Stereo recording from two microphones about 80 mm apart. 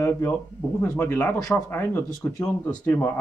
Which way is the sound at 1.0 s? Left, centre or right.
Left.